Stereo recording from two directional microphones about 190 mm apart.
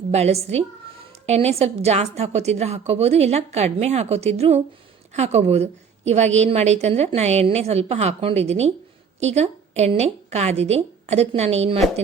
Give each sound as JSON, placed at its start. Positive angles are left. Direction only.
{"t": 0.1, "sound": "a woman's voice", "side_deg": -35}